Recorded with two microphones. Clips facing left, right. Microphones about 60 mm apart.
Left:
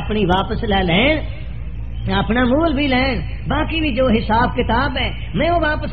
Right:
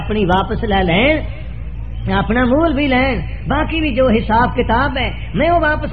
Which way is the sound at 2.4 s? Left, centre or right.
Centre.